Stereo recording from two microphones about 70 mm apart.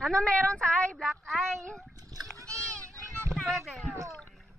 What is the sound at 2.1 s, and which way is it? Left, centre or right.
Splash, right.